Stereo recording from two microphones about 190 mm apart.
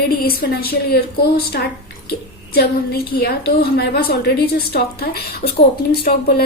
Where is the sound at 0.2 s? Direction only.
55° left (ahead or behind).